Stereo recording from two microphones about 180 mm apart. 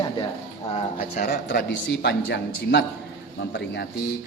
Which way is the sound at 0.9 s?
55° left (ahead or behind).